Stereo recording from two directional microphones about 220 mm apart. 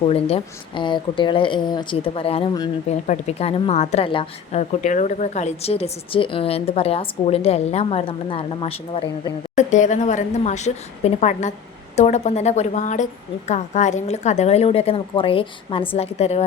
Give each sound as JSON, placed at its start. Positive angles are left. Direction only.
{"t": 0.0, "sound": "a woman's voice", "side_deg": 25}